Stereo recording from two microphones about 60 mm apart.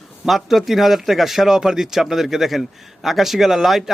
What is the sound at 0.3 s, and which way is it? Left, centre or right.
Speech, centre.